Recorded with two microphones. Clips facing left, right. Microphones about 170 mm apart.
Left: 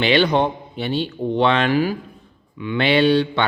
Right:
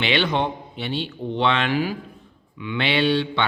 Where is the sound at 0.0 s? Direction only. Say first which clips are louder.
Left 5 dB; 40° left (ahead or behind).